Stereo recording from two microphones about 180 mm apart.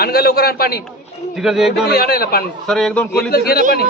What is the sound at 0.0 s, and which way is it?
Speech, 55° left (ahead or behind).